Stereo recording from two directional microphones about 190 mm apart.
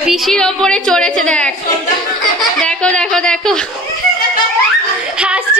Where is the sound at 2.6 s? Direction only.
5° left (ahead or behind).